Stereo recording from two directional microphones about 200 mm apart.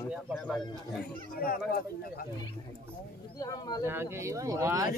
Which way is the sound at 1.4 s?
50° left (ahead or behind).